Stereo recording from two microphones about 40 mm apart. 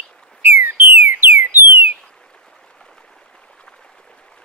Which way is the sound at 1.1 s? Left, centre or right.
Right.